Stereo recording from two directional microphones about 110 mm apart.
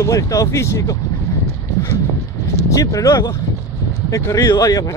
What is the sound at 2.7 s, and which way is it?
Speech, 30° left (ahead or behind).